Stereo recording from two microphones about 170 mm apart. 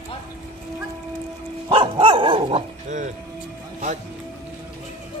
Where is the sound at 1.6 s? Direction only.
30° right (ahead or behind).